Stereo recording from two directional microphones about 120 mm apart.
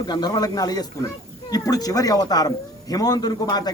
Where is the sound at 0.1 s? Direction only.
35° left (ahead or behind).